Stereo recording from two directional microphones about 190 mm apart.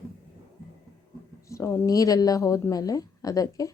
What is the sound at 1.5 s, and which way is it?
A woman's voice, 15° left (ahead or behind).